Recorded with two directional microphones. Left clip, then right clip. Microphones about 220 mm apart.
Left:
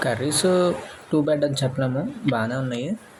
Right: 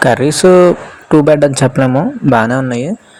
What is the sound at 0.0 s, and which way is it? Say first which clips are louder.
Speech: right 13 dB; 35° right (ahead or behind).